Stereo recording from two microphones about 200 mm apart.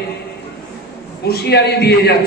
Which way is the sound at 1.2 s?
55° left (ahead or behind).